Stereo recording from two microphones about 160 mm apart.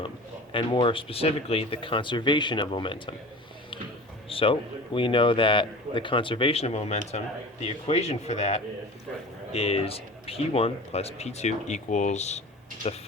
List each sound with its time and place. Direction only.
0.5 s speech: 30° left (ahead or behind)
4.3 s a man's voice: 35° left (ahead or behind)